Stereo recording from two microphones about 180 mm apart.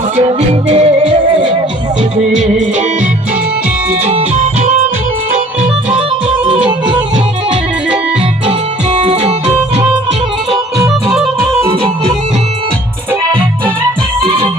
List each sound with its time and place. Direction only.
0.2 s music: 35° right (ahead or behind)
6.7 s music: 25° right (ahead or behind)
8.4 s music: 35° right (ahead or behind)
11.7 s organ: 30° right (ahead or behind)